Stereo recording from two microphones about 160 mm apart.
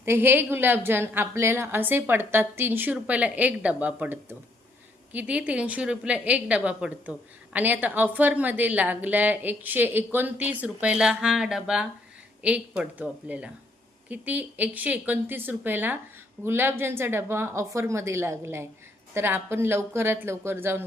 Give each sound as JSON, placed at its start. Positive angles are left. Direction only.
{"t": 0.0, "sound": "a woman's voice", "side_deg": -15}